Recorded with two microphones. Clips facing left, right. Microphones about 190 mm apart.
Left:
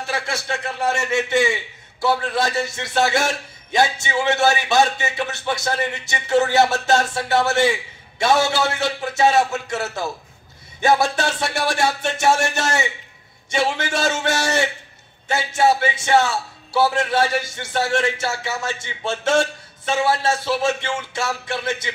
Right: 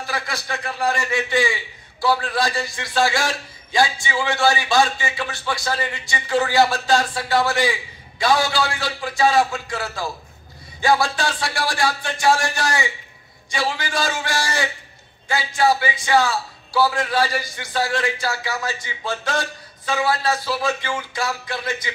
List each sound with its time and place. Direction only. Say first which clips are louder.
0.0 s a man's voice: left 2 dB; 25° left (ahead or behind)